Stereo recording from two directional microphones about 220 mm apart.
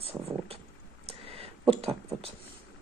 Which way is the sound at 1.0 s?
25° right (ahead or behind).